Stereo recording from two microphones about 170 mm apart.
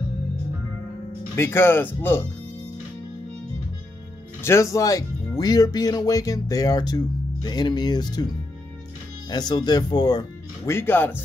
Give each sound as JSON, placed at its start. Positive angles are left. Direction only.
{"t": 1.3, "sound": "speech", "side_deg": 15}
{"t": 4.4, "sound": "speech", "side_deg": 15}
{"t": 9.3, "sound": "speech", "side_deg": 25}
{"t": 10.7, "sound": "speech", "side_deg": 15}